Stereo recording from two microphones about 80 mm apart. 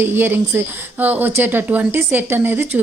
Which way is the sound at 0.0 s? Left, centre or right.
Right.